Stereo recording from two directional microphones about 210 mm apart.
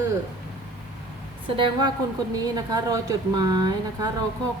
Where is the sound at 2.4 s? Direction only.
20° right (ahead or behind).